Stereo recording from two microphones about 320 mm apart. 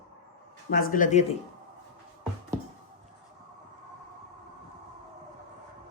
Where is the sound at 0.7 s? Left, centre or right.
Left.